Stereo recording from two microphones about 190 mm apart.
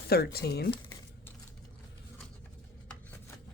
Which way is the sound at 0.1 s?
55° left (ahead or behind).